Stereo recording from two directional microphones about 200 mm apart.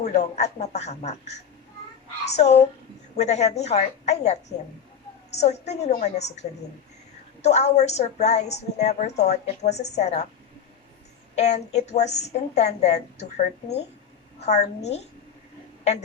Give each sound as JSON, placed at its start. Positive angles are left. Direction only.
{"t": 0.0, "sound": "a woman's voice", "side_deg": 35}
{"t": 2.3, "sound": "a woman's voice", "side_deg": 35}
{"t": 7.4, "sound": "a woman's voice", "side_deg": 35}
{"t": 11.3, "sound": "a woman's voice", "side_deg": 35}